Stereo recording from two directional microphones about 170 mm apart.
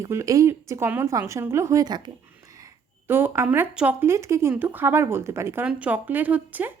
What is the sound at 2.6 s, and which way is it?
Speech, 10° right (ahead or behind).